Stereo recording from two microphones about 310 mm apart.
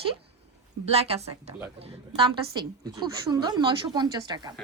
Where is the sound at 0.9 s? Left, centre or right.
Centre.